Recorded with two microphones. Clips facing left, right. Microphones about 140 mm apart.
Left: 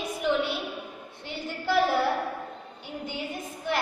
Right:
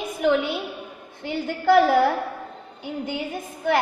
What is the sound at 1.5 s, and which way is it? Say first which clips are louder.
Speech: right 7 dB; 55° right (ahead or behind).